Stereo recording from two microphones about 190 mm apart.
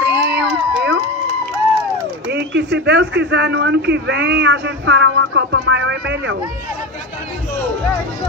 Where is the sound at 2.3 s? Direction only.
65° right (ahead or behind).